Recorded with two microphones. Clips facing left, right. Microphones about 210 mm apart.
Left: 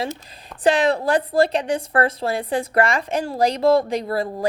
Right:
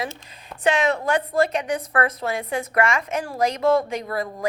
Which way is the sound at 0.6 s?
35° left (ahead or behind).